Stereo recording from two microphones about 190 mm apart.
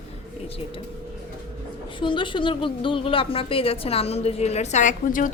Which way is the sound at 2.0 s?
25° left (ahead or behind).